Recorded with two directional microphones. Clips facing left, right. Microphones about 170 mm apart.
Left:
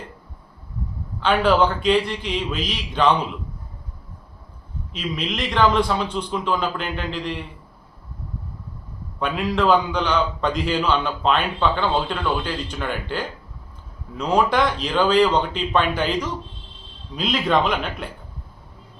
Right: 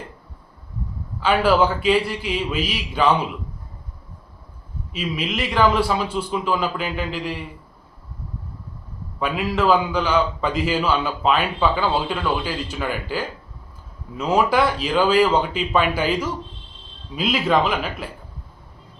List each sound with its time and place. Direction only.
1.2 s a man's voice: 5° right (ahead or behind)
4.9 s a man's voice: 5° right (ahead or behind)
9.1 s a man's voice: 5° right (ahead or behind)